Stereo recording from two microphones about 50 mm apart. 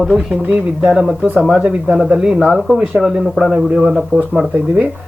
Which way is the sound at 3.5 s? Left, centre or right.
Centre.